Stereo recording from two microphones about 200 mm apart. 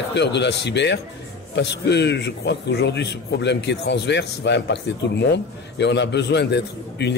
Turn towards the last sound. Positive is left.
turn(degrees=60)  # may be behind; listen again after turning